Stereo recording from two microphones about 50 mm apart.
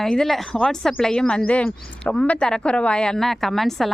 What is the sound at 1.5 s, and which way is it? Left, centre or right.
A woman's voice, left.